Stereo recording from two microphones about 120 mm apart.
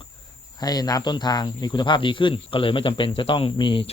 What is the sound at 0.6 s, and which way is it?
Speech, 35° left (ahead or behind).